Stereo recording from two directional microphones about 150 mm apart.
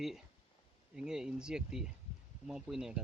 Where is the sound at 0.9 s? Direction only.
5° right (ahead or behind).